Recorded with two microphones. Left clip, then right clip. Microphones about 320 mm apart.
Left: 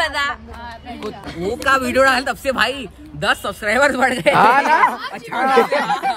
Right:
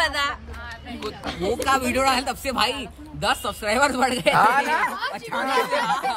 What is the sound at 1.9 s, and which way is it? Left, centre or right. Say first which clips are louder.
A woman's voice: left 7 dB; centre.